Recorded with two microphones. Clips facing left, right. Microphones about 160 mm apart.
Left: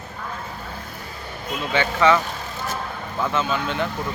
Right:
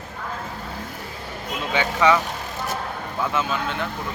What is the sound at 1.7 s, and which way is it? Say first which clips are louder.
Speech: left 1 dB; 10° right (ahead or behind).